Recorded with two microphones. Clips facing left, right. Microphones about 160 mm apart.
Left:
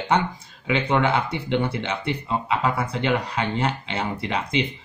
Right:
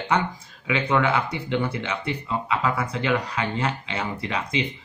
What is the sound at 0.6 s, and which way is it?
Speech, 25° left (ahead or behind).